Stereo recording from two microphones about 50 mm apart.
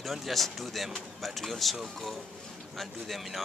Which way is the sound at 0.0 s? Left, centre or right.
Centre.